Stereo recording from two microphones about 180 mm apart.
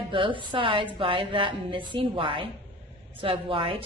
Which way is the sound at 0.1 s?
30° right (ahead or behind).